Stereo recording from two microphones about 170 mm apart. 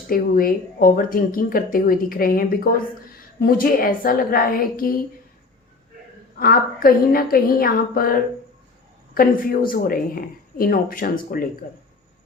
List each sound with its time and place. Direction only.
0.1 s speech: 55° left (ahead or behind)
6.4 s speech: 60° left (ahead or behind)